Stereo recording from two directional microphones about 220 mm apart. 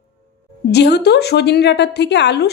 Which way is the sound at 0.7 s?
50° left (ahead or behind).